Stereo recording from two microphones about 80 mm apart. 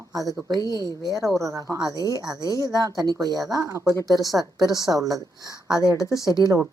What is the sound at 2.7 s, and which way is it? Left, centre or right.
Speech, right.